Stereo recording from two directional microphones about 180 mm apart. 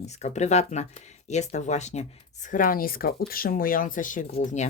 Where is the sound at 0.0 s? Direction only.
40° left (ahead or behind).